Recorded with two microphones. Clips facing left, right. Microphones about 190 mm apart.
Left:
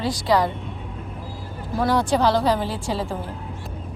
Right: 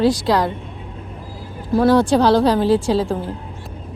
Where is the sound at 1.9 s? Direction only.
75° right (ahead or behind).